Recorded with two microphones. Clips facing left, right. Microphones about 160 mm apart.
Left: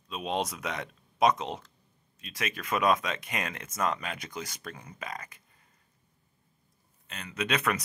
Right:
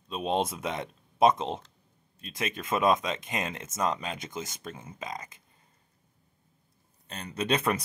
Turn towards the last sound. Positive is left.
turn(degrees=-30)  # may be behind; listen again after turning